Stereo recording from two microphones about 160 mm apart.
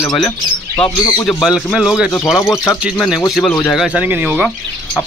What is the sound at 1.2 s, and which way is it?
Speech, centre (ahead or behind).